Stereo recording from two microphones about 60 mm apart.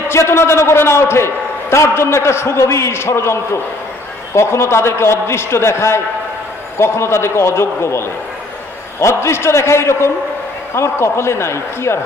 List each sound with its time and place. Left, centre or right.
0.1 s a man's voice: left